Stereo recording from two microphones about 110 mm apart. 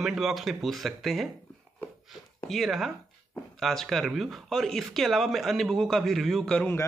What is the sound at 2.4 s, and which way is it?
Speech, centre (ahead or behind).